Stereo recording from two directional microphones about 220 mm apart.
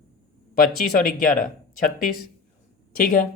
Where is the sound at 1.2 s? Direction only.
40° left (ahead or behind).